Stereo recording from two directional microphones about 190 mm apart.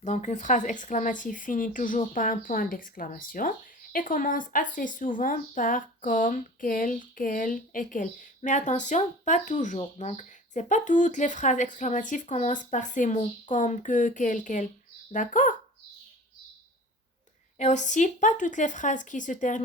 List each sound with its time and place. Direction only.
0.0 s speech: 40° left (ahead or behind)
17.6 s speech: 40° left (ahead or behind)